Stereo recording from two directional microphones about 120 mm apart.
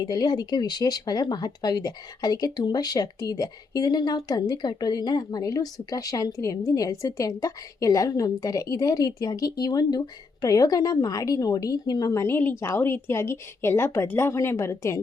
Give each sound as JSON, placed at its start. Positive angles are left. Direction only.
{"t": 0.0, "sound": "a woman's voice", "side_deg": 35}